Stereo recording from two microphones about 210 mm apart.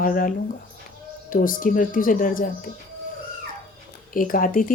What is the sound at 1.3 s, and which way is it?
A woman's voice, 40° left (ahead or behind).